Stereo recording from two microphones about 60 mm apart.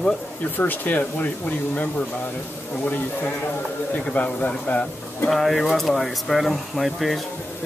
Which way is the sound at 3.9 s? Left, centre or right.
Left.